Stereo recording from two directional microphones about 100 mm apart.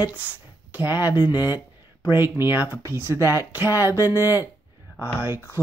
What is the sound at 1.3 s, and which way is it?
Mantra, 40° left (ahead or behind).